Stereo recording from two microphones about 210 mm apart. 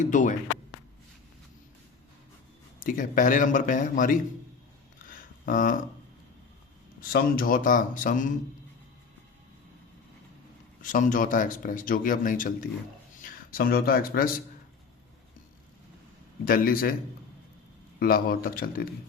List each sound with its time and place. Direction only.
0.0 s speech: 35° left (ahead or behind)
2.8 s speech: 40° left (ahead or behind)
5.5 s speech: 40° left (ahead or behind)
7.1 s speech: 45° left (ahead or behind)
10.9 s speech: 40° left (ahead or behind)
16.5 s speech: 45° left (ahead or behind)
18.0 s speech: 45° left (ahead or behind)